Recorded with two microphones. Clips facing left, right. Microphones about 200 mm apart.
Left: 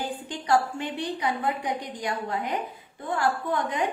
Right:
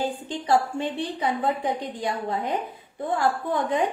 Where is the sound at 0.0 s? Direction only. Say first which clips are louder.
Right 4 dB; 25° right (ahead or behind).